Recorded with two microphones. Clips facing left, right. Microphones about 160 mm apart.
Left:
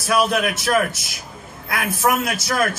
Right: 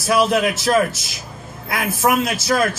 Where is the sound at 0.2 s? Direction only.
25° right (ahead or behind).